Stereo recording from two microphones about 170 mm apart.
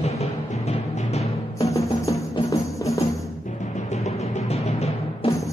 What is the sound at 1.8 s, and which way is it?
Music, 20° left (ahead or behind).